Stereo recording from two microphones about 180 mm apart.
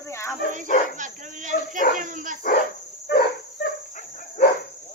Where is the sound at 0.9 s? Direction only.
45° right (ahead or behind).